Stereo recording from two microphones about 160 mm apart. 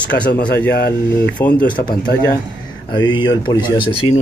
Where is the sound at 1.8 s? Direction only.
85° left.